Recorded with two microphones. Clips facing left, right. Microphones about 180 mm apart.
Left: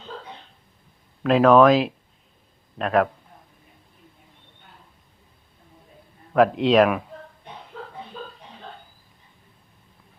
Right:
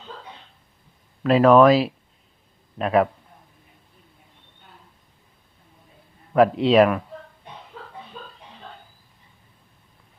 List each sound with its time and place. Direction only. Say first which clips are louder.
1.2 s speech: right 1 dB; centre (ahead or behind)
6.3 s speech: right 1 dB; 5° right (ahead or behind)